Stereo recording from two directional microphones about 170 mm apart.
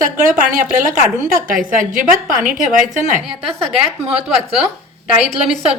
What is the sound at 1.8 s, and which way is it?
Speech, 50° right (ahead or behind).